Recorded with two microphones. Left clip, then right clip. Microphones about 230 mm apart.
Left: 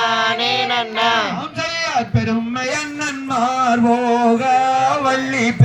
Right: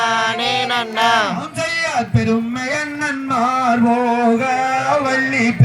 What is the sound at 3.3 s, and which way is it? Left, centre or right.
Music, right.